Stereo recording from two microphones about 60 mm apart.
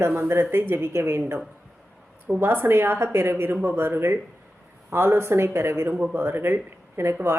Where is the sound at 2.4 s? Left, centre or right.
Right.